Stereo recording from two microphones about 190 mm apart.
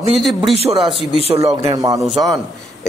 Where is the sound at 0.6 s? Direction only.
30° right (ahead or behind).